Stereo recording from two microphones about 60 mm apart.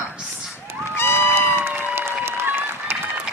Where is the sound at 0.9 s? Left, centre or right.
Left.